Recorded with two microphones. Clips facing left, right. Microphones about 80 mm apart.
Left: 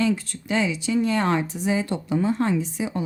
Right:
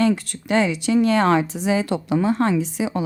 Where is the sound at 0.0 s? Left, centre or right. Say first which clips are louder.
Right 4 dB; right.